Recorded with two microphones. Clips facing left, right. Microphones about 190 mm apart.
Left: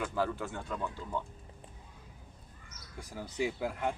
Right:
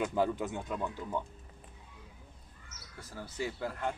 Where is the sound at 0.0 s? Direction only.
20° right (ahead or behind).